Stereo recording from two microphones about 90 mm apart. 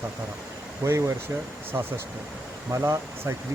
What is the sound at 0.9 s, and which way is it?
Speech, 35° right (ahead or behind).